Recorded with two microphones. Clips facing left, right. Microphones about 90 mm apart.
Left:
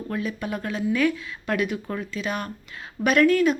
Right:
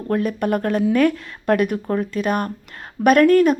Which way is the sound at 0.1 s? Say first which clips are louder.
Right 10 dB; 55° right (ahead or behind).